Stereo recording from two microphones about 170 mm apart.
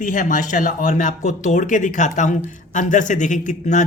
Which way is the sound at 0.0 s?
50° left (ahead or behind).